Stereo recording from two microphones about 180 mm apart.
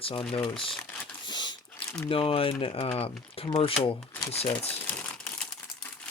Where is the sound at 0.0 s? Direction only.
30° left (ahead or behind).